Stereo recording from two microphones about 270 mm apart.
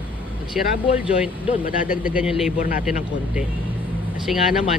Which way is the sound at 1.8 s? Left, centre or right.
Left.